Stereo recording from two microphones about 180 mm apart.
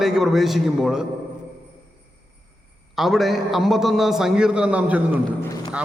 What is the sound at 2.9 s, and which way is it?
A man's voice, centre (ahead or behind).